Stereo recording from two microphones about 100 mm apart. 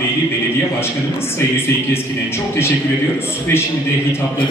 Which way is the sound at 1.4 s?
25° left (ahead or behind).